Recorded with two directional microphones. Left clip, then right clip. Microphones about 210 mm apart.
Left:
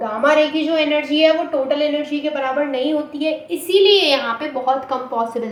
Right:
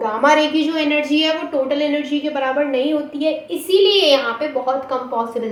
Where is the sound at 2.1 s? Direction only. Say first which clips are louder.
Right 1 dB; 20° right (ahead or behind).